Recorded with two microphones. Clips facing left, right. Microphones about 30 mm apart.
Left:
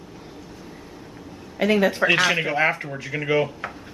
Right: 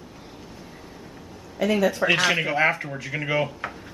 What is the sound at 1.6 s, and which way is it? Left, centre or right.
Speech, left.